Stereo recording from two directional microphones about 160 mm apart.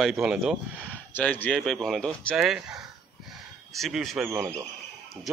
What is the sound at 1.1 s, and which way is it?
A man's voice, 10° left (ahead or behind).